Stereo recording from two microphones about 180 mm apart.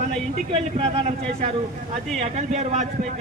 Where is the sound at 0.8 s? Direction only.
35° right (ahead or behind).